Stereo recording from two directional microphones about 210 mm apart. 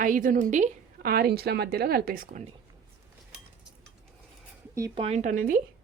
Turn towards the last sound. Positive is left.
turn(degrees=-40)  # may be behind; listen again after turning